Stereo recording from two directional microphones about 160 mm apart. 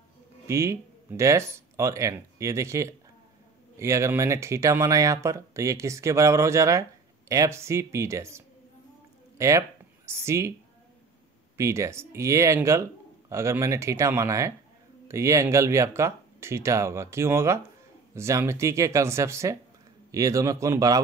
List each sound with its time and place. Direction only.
0.5 s speech: 15° right (ahead or behind)
11.5 s speech: 15° right (ahead or behind)